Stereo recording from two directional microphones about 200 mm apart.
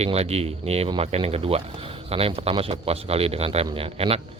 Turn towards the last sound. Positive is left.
turn(degrees=-30)  # may be behind; listen again after turning